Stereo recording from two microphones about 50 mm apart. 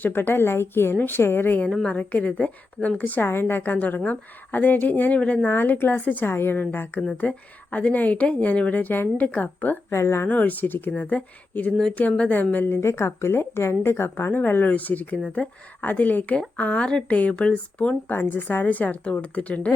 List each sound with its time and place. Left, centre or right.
0.0 s speech: left
0.9 s a woman's voice: left
1.9 s a woman's voice: left
3.2 s a woman's voice: left
5.5 s a woman's voice: left
7.2 s a woman's voice: left
9.9 s speech: left
10.2 s a woman's voice: left
12.9 s a woman's voice: left
18.1 s a woman's voice: left